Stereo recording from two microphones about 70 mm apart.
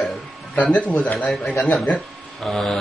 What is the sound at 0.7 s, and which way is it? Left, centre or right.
Mantra, centre.